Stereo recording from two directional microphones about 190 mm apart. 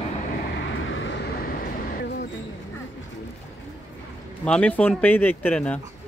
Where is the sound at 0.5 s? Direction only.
75° left (ahead or behind).